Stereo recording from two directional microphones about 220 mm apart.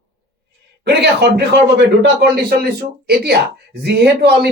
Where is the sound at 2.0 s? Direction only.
45° right (ahead or behind).